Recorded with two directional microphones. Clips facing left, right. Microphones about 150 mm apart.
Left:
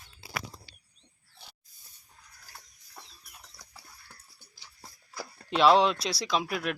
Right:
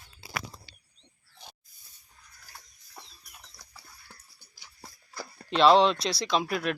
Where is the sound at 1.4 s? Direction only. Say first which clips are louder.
Right 4 dB; 15° right (ahead or behind).